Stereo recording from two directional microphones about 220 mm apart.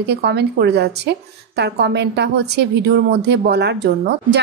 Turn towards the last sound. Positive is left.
turn(degrees=-50)  # may be behind; listen again after turning